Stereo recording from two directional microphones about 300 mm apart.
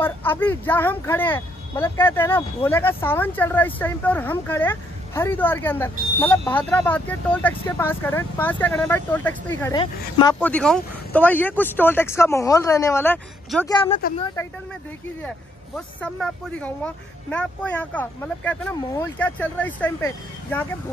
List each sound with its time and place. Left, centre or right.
0.0 s speech: centre; by 14.3 s left
16.0 s speech: centre